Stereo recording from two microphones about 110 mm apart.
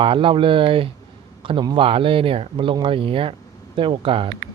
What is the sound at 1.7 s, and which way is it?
Speech, 55° right (ahead or behind).